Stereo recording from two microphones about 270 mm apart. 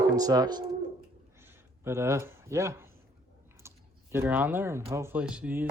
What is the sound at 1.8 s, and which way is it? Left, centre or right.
Speech, centre.